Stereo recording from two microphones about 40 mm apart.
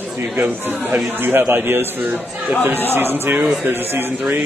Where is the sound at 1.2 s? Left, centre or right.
Right.